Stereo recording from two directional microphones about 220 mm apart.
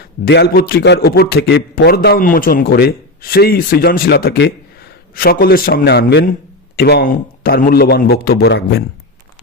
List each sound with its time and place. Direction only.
0.3 s a man's voice: 50° left (ahead or behind)